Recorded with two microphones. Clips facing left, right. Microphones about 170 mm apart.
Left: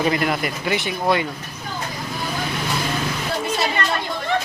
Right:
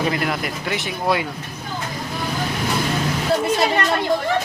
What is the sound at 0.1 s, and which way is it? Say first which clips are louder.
Speech: left 2 dB; centre (ahead or behind).